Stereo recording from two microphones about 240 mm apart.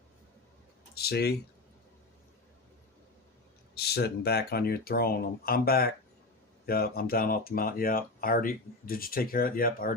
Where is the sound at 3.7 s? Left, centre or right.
Left.